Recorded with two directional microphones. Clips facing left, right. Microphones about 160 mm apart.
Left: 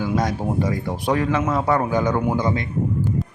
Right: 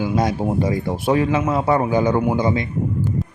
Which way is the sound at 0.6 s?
20° right (ahead or behind).